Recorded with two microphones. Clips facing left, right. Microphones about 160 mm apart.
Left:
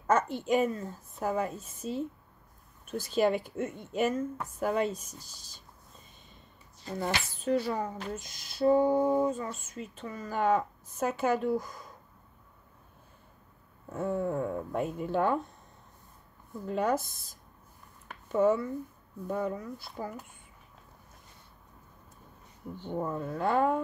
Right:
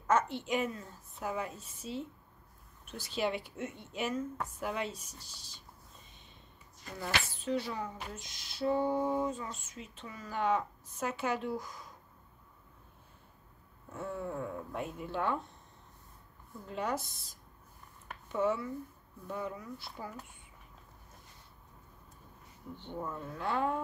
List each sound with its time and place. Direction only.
0.0 s a woman's voice: 45° left (ahead or behind)
7.0 s speech: 45° left (ahead or behind)
13.9 s speech: 50° left (ahead or behind)
16.6 s speech: 50° left (ahead or behind)
18.3 s speech: 45° left (ahead or behind)
22.8 s speech: 45° left (ahead or behind)